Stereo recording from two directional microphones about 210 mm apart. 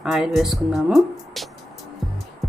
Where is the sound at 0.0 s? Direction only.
Centre (ahead or behind).